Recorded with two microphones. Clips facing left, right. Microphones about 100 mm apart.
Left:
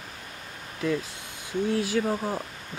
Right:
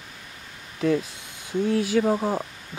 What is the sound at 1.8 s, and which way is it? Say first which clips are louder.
Speech: right 4 dB; 20° right (ahead or behind).